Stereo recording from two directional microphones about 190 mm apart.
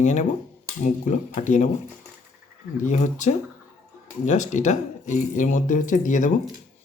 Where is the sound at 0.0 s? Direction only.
40° left (ahead or behind).